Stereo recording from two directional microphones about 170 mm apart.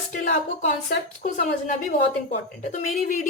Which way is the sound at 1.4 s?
45° left (ahead or behind).